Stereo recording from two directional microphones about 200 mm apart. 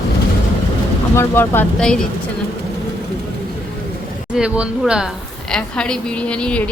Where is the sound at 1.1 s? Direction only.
15° left (ahead or behind).